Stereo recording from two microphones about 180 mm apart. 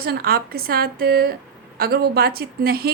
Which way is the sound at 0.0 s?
60° right (ahead or behind).